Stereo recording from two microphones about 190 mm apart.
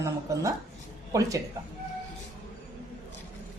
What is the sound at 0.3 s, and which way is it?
Speech, 15° right (ahead or behind).